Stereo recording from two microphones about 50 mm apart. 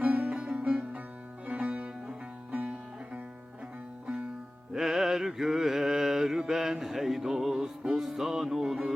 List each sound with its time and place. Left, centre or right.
0.2 s music: centre
1.5 s music: right
4.7 s mantra: centre